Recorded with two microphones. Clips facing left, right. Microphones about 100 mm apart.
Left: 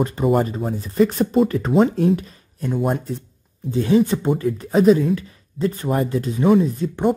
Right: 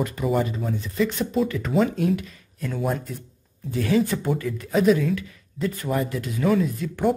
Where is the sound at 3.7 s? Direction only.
25° left (ahead or behind).